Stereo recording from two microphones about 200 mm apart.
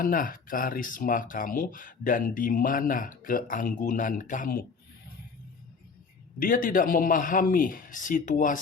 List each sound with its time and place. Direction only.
0.0 s speech: 45° left (ahead or behind)
6.4 s speech: 45° left (ahead or behind)